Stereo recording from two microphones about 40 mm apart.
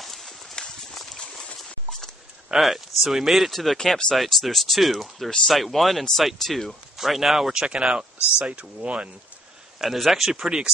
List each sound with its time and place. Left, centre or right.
0.0 s horse: centre
2.5 s speech: centre
3.7 s speech: centre
7.0 s speech: centre
7.5 s speech: right
9.8 s speech: centre